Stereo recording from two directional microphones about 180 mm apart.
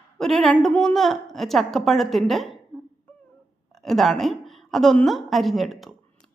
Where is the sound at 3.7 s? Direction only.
Centre (ahead or behind).